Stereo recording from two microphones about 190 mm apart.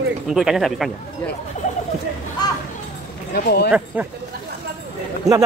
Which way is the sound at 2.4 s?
20° left (ahead or behind).